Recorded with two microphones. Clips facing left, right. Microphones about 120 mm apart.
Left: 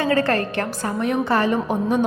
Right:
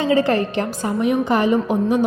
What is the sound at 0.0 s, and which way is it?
A woman's voice, 15° right (ahead or behind).